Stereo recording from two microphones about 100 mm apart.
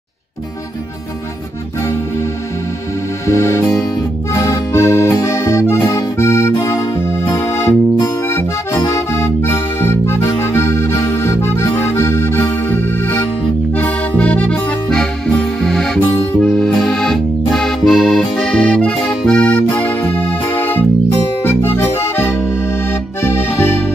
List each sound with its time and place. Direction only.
3.3 s music: 30° left (ahead or behind)
6.5 s music: 35° left (ahead or behind)
8.3 s accordion: 25° left (ahead or behind)
8.8 s music: 30° left (ahead or behind)
10.2 s accordion: 30° left (ahead or behind)
13.7 s music: 15° left (ahead or behind)
16.3 s accordion: 5° left (ahead or behind)
21.4 s music: 20° left (ahead or behind)
22.8 s accordion: 25° left (ahead or behind)